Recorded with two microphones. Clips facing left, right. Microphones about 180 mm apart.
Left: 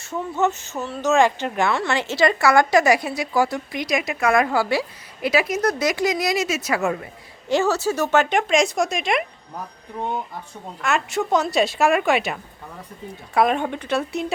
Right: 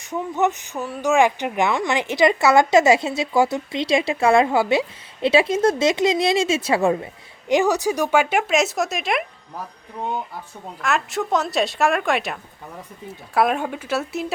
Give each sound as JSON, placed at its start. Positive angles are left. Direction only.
{"t": 0.0, "sound": "speech", "side_deg": -15}
{"t": 10.8, "sound": "speech", "side_deg": 0}